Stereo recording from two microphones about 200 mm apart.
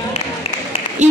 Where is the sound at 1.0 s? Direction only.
35° right (ahead or behind).